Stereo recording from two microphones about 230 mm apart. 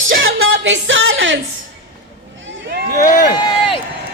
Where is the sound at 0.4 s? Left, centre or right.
Right.